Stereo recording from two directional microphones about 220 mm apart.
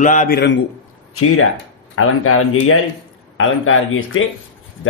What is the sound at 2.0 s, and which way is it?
Speech, 70° left (ahead or behind).